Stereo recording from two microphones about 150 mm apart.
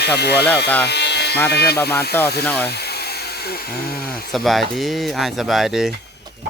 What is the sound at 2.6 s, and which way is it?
Speech, 90° left.